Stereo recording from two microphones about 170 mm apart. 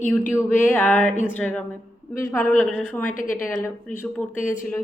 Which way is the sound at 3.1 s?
50° left (ahead or behind).